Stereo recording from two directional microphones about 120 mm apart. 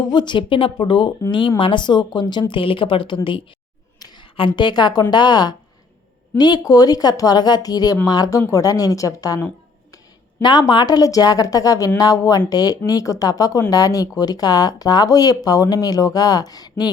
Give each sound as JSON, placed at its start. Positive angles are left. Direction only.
{"t": 0.1, "sound": "a woman's voice", "side_deg": 40}
{"t": 10.4, "sound": "speech", "side_deg": 40}